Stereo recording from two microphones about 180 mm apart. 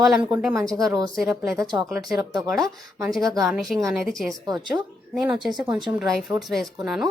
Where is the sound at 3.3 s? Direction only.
Centre (ahead or behind).